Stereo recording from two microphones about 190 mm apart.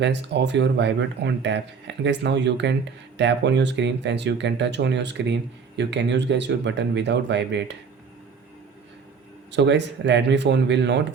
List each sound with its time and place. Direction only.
0.0 s speech: 65° right (ahead or behind)
9.5 s speech: 65° right (ahead or behind)